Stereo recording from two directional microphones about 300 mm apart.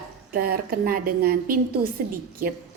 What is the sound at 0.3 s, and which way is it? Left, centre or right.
A woman's voice, right.